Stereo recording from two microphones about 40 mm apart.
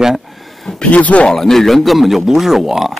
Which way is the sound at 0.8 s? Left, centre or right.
Left.